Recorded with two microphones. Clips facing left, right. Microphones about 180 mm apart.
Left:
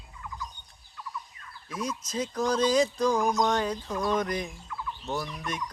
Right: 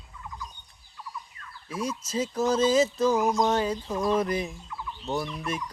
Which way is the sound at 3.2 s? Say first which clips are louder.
Right 2 dB; 25° right (ahead or behind).